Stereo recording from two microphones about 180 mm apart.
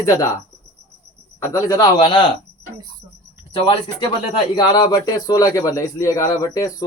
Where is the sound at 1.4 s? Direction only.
15° left (ahead or behind).